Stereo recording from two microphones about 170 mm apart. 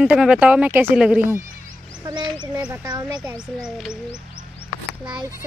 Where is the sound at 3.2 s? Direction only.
5° right (ahead or behind).